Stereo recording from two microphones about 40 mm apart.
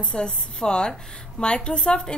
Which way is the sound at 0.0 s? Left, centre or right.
Left.